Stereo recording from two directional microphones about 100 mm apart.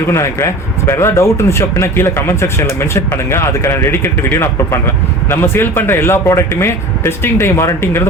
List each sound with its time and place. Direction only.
0.1 s speech: 30° left (ahead or behind)